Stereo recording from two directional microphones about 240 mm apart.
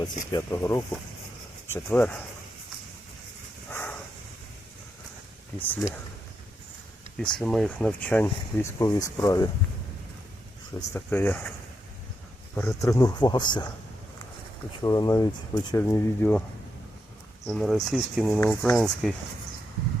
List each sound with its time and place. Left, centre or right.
0.3 s speech: centre
3.7 s dog: centre
5.5 s speech: centre
7.2 s speech: centre
10.8 s speech: centre
12.5 s speech: centre
14.8 s speech: centre
17.4 s speech: centre